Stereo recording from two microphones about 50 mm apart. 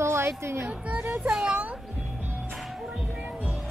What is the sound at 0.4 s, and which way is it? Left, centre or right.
Speech, right.